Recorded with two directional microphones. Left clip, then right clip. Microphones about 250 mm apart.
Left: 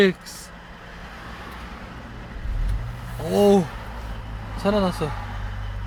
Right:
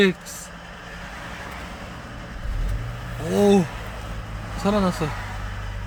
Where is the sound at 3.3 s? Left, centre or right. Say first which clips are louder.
Left 1 dB; centre.